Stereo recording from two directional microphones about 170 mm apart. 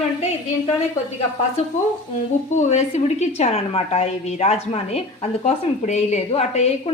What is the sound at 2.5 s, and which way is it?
A woman's voice, 40° left (ahead or behind).